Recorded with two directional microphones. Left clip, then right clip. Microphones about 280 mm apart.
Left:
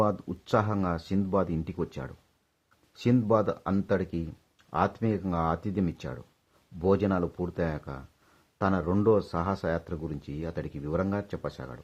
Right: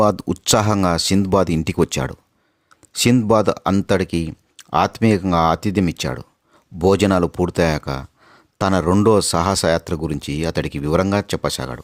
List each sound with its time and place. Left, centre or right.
0.0 s speech: right